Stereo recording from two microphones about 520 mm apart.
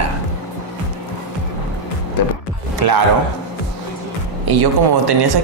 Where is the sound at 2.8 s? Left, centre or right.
Right.